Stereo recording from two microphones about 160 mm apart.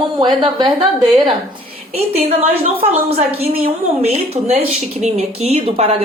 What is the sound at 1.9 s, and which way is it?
A woman's voice, 40° right (ahead or behind).